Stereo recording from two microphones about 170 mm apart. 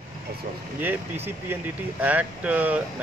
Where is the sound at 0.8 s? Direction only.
10° right (ahead or behind).